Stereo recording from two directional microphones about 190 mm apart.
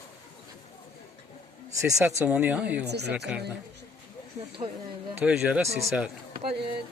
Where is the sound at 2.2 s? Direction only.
10° right (ahead or behind).